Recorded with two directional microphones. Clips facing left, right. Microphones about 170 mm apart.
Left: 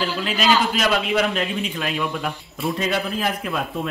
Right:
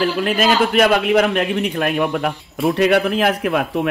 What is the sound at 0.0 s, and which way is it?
A man's voice, 55° right (ahead or behind).